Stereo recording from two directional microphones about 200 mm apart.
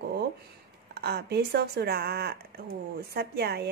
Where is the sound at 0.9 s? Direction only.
55° right (ahead or behind).